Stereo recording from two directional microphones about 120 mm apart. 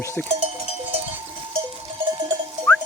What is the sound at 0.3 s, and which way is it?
Cowbell, 65° right (ahead or behind).